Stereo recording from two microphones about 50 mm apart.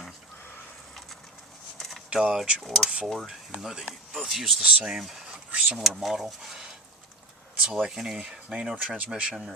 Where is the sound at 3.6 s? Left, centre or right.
Centre.